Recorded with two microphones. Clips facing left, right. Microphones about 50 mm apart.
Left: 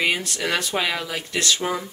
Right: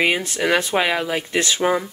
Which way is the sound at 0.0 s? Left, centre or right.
Centre.